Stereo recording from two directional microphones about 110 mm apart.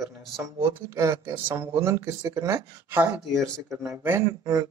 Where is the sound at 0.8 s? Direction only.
25° right (ahead or behind).